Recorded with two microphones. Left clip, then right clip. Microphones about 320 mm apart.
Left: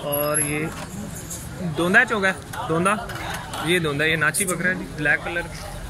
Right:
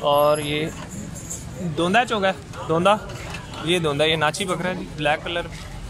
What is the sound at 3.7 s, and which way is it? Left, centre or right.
Speech, right.